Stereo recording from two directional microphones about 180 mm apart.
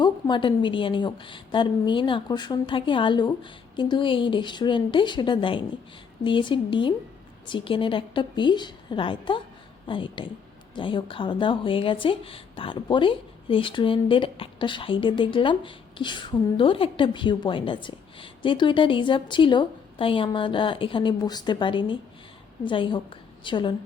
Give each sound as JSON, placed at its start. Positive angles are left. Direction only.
{"t": 0.0, "sound": "a woman's voice", "side_deg": 25}